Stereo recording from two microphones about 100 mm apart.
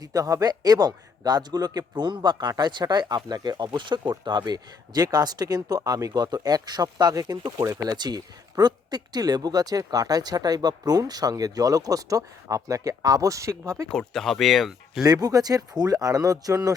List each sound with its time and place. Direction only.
0.0 s a man's voice: 40° right (ahead or behind)
7.6 s speech: 30° right (ahead or behind)
7.9 s speech: 45° right (ahead or behind)
13.9 s speech: 5° left (ahead or behind)
15.0 s speech: 40° right (ahead or behind)